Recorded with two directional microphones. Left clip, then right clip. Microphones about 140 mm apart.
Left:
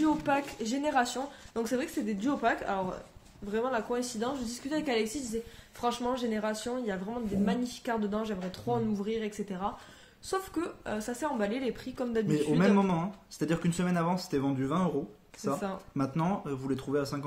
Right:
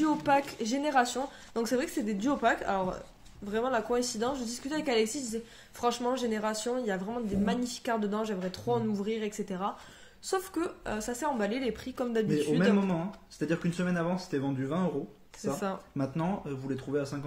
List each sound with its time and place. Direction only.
0.0 s a woman's voice: 25° right (ahead or behind)
12.3 s speech: 40° left (ahead or behind)
16.0 s speech: 30° left (ahead or behind)